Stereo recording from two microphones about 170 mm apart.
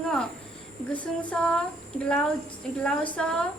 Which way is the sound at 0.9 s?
5° left (ahead or behind).